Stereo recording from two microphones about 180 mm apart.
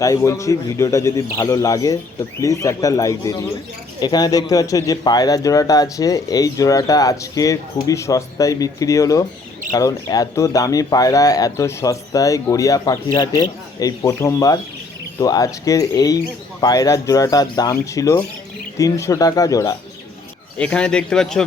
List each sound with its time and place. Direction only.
0.0 s a man's voice: 15° left (ahead or behind)
20.6 s speech: 5° left (ahead or behind)